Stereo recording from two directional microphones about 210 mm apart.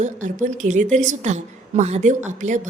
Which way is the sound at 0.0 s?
35° right (ahead or behind).